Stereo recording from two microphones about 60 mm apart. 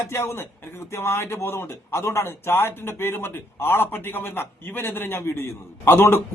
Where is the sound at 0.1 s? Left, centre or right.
Left.